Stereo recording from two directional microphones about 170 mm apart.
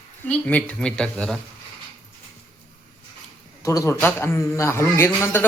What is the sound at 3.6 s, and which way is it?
A man's voice, 20° left (ahead or behind).